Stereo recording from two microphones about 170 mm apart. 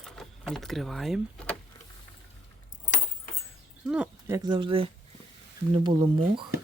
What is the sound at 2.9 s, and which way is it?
Keys jangling, 50° left (ahead or behind).